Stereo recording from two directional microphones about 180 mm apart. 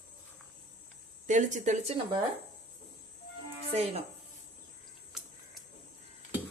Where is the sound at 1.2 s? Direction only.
40° right (ahead or behind).